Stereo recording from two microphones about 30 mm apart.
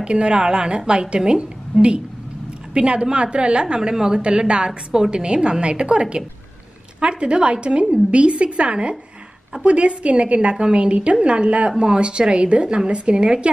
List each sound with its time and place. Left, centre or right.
0.0 s a woman's voice: right
13.2 s speech: right